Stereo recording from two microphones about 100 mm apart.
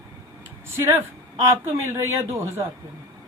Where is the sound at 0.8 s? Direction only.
30° right (ahead or behind).